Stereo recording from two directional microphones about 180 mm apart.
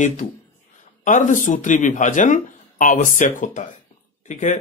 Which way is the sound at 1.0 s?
45° left (ahead or behind).